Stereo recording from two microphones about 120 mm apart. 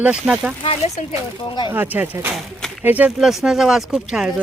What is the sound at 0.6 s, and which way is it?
Speech, 50° left (ahead or behind).